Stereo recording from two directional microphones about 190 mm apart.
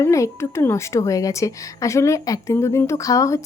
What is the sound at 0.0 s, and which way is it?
Speech, 15° left (ahead or behind).